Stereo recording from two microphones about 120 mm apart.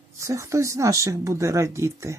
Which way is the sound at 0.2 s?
25° right (ahead or behind).